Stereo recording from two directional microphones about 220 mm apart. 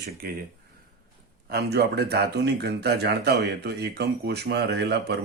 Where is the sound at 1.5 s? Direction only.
45° right (ahead or behind).